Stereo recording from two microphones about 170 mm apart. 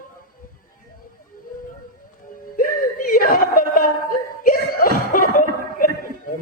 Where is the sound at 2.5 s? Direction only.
55° left (ahead or behind).